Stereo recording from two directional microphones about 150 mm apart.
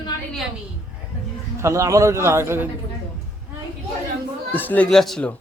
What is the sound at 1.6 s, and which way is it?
A man's voice, 20° right (ahead or behind).